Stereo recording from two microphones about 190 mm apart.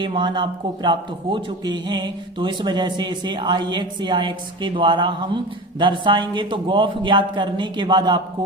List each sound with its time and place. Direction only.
0.0 s speech: 25° right (ahead or behind)